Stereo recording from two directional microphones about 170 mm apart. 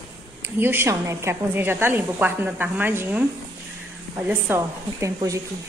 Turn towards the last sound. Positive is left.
turn(degrees=-20)  # may be behind; listen again after turning